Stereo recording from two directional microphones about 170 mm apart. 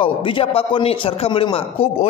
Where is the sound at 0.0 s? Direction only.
30° left (ahead or behind).